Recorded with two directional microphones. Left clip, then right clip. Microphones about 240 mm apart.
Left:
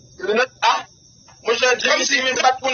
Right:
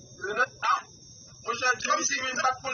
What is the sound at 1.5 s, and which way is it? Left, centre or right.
Speech, left.